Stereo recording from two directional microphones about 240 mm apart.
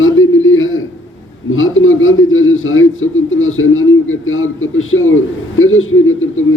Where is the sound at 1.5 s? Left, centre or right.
Left.